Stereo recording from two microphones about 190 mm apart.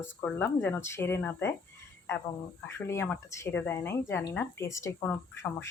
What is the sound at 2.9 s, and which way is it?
Speech, 15° left (ahead or behind).